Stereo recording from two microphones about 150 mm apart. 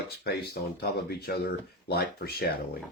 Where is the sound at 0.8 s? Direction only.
90° left.